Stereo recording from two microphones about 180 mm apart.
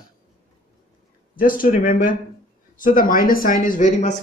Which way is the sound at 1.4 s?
50° left (ahead or behind).